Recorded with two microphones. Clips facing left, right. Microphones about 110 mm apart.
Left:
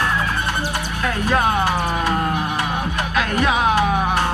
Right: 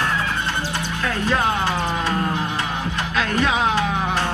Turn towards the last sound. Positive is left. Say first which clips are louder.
# left 2 dB
turn(degrees=15)  # may be behind; listen again after turning